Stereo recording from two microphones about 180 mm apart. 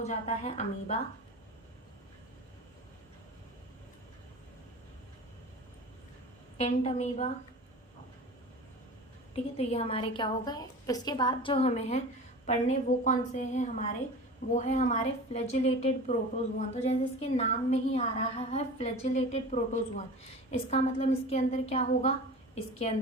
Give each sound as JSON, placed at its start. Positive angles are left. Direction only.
{"t": 0.0, "sound": "a woman's voice", "side_deg": 35}
{"t": 6.6, "sound": "a woman's voice", "side_deg": 40}
{"t": 9.3, "sound": "a woman's voice", "side_deg": 35}